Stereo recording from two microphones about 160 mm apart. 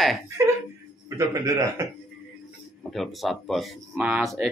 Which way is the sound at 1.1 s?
20° right (ahead or behind).